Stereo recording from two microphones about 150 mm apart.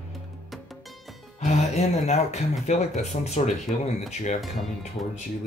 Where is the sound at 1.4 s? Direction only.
50° left (ahead or behind).